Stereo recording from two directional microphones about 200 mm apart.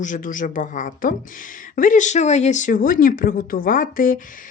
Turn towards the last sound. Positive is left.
turn(degrees=45)  # may be behind; listen again after turning